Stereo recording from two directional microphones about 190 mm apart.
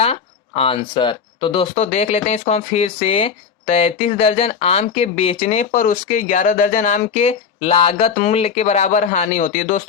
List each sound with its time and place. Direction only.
0.0 s speech: 30° left (ahead or behind)